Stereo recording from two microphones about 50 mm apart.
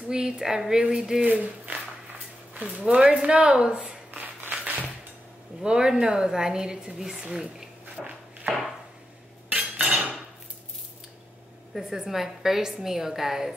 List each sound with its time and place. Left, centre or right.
0.1 s a woman's voice: centre
1.2 s speech: right
2.8 s speech: right
4.5 s music: right
5.6 s a woman's voice: centre
8.0 s a sound: centre
9.5 s cutlery: right
12.0 s a woman's voice: centre